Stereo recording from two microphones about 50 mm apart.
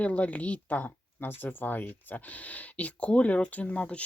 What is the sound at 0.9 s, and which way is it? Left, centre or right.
Speech, left.